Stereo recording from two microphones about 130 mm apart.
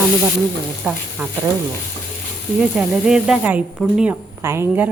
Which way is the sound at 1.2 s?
10° right (ahead or behind).